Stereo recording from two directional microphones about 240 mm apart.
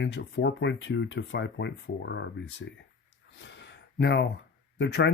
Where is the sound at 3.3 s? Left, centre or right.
Left.